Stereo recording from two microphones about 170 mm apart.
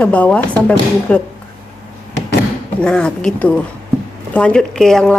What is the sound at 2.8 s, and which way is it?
Speech, 5° left (ahead or behind).